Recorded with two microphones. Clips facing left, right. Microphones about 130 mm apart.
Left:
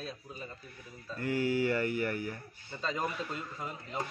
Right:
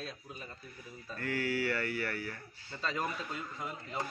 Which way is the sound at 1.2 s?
15° left (ahead or behind).